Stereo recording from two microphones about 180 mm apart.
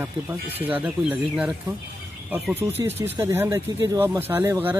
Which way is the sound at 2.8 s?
15° right (ahead or behind).